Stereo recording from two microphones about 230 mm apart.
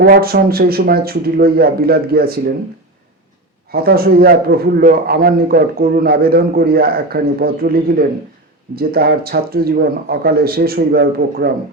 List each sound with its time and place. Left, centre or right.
0.0 s a man's voice: right
3.7 s a man's voice: right